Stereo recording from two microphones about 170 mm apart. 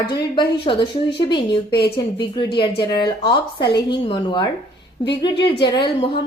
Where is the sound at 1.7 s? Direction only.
70° left (ahead or behind).